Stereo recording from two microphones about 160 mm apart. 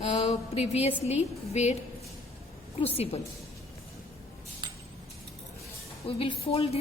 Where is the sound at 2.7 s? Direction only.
40° left (ahead or behind).